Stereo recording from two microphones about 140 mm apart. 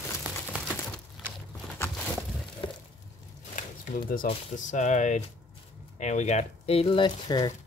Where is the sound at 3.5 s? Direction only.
70° left (ahead or behind).